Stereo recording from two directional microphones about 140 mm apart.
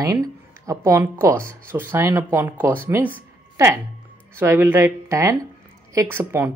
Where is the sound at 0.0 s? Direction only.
20° right (ahead or behind).